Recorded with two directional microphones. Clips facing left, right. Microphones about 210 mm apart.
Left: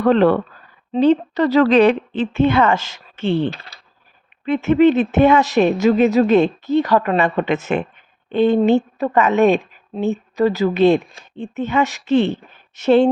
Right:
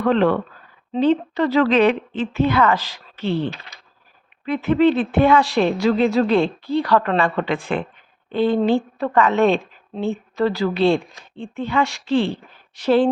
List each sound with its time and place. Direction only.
0.0 s a woman's voice: 40° left (ahead or behind); by 3.3 s 25° left (ahead or behind)
3.5 s speech: 35° left (ahead or behind)
4.4 s speech: 25° left (ahead or behind)